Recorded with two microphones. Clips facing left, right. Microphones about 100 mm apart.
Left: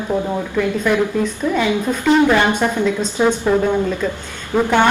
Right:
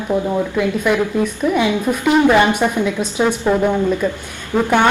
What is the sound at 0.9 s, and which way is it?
A woman's voice, 10° right (ahead or behind).